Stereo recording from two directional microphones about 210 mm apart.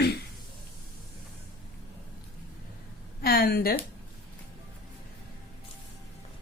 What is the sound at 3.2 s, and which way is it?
Speech, 45° left (ahead or behind).